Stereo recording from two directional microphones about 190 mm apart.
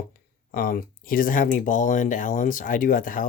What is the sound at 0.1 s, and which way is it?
Speech, 50° left (ahead or behind).